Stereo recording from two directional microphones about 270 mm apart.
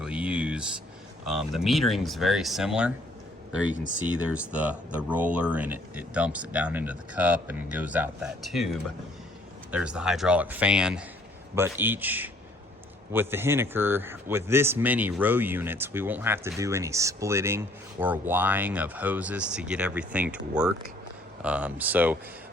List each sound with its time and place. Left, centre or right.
0.0 s a sound: centre
1.3 s speech: centre
4.0 s speech: centre